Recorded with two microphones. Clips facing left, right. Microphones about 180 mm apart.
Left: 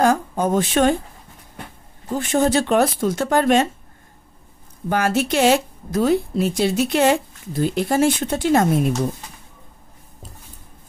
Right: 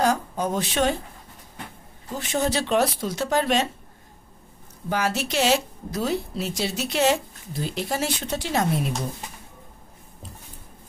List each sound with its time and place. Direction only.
0.0 s speech: 50° left (ahead or behind)
2.0 s speech: 50° left (ahead or behind)
4.8 s speech: 55° left (ahead or behind)